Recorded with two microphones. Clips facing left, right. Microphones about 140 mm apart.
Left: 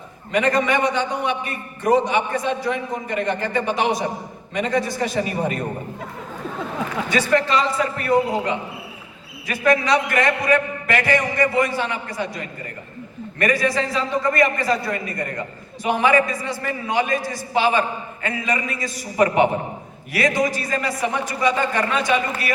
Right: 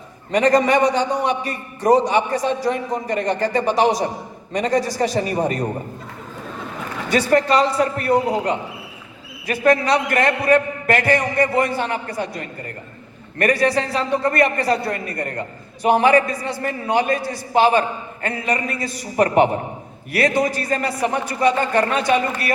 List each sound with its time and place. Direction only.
0.3 s a man's voice: 35° right (ahead or behind)
7.1 s a man's voice: 50° right (ahead or behind)
9.5 s a man's voice: 50° right (ahead or behind)